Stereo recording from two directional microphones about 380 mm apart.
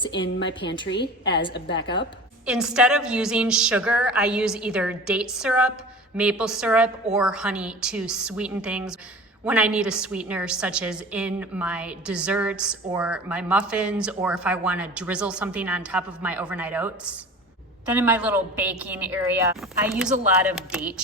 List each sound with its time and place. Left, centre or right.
0.1 s a woman's voice: left
2.5 s a woman's voice: centre